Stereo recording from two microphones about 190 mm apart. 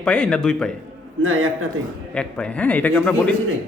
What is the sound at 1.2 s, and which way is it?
Speech, 90° right.